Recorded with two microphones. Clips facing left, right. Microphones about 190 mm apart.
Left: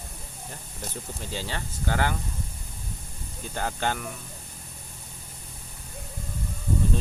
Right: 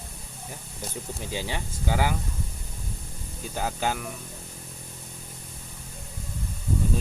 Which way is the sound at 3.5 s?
5° right (ahead or behind).